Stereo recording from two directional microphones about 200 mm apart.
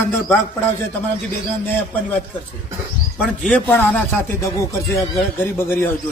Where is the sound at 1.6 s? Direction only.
10° left (ahead or behind).